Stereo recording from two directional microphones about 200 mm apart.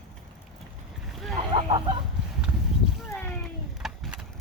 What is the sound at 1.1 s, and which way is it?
Boat, centre (ahead or behind).